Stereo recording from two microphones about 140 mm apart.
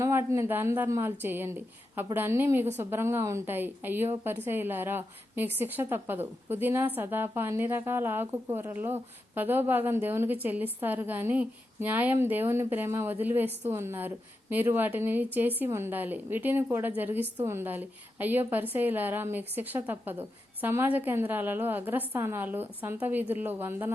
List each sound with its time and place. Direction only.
0.0 s a woman's voice: 20° right (ahead or behind)